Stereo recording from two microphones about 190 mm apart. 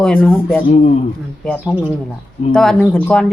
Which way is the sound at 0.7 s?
35° left (ahead or behind).